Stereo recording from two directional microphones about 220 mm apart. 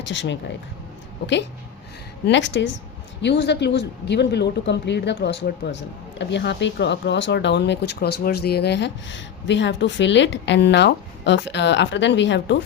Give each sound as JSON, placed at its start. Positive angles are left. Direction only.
{"t": 0.1, "sound": "speech", "side_deg": 55}
{"t": 2.2, "sound": "speech", "side_deg": 55}